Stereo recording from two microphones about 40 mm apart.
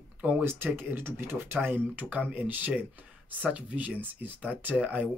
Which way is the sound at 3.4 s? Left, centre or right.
Right.